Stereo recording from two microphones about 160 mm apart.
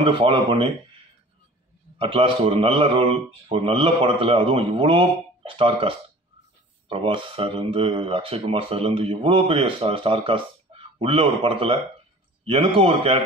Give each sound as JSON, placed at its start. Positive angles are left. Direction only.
{"t": 0.0, "sound": "speech", "side_deg": -30}
{"t": 2.0, "sound": "speech", "side_deg": -35}